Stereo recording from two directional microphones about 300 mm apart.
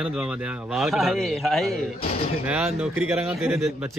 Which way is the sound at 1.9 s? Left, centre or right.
Centre.